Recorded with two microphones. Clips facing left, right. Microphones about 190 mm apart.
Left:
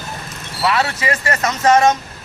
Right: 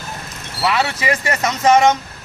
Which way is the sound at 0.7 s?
20° right (ahead or behind).